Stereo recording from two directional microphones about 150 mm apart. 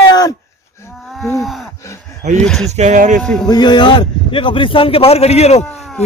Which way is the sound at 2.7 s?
50° right (ahead or behind).